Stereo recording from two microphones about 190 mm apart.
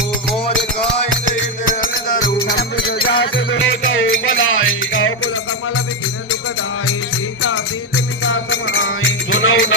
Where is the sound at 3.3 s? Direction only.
90° left.